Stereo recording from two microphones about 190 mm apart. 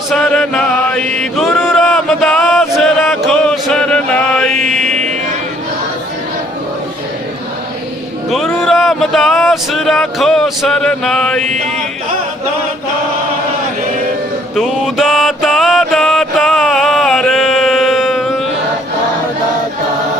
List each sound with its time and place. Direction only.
0.1 s chant: 5° left (ahead or behind)
4.9 s a sound: 40° right (ahead or behind)
8.3 s speech: centre (ahead or behind)
14.5 s mantra: centre (ahead or behind)